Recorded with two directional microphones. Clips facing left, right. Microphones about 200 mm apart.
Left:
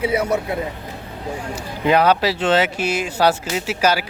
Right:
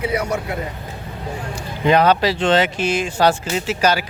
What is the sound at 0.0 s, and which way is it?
Speech, 25° left (ahead or behind).